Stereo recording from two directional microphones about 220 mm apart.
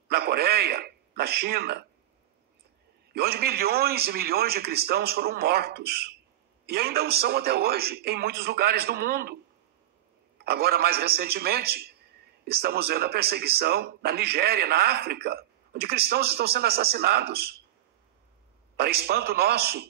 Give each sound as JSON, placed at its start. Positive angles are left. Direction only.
{"t": 0.1, "sound": "speech", "side_deg": -45}
{"t": 3.1, "sound": "a man's voice", "side_deg": -45}
{"t": 18.8, "sound": "a man's voice", "side_deg": -45}